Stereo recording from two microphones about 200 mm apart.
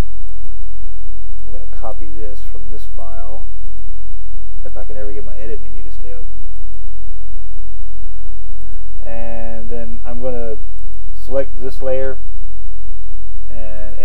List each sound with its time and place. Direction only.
1.5 s speech: 20° right (ahead or behind)
4.6 s speech: 20° right (ahead or behind)
9.0 s speech: 20° right (ahead or behind)
13.5 s a sound: 20° right (ahead or behind)